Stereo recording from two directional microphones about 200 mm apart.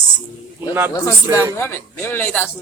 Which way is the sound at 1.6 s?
10° left (ahead or behind).